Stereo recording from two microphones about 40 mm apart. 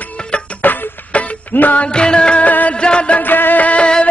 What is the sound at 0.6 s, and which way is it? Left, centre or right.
Music, left.